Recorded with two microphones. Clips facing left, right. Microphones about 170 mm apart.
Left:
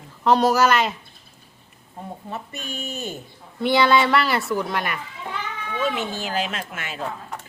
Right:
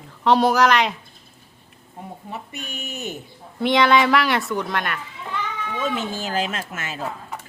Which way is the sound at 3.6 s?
Centre (ahead or behind).